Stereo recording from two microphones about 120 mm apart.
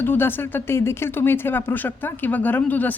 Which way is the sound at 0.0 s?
15° left (ahead or behind).